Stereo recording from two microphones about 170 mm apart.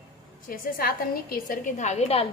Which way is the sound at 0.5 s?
60° left (ahead or behind).